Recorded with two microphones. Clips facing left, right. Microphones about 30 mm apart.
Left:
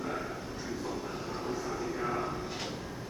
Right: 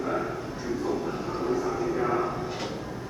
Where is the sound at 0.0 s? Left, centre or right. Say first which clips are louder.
Right 7 dB; centre.